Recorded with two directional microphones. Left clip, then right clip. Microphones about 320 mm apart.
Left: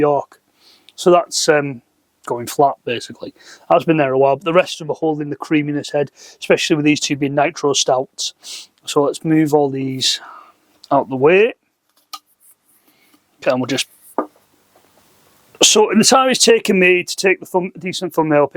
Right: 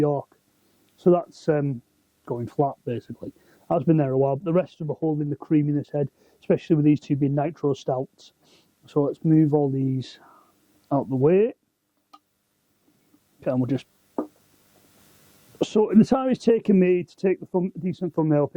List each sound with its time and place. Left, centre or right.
0.0 s speech: centre
4.9 s speech: left
5.1 s speech: centre
12.1 s a sound: centre
13.4 s a sound: centre
15.5 s speech: centre